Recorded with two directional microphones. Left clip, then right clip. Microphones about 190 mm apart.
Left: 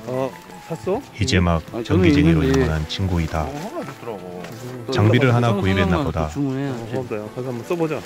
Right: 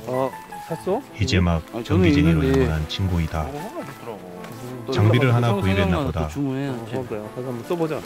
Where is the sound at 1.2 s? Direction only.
5° left (ahead or behind).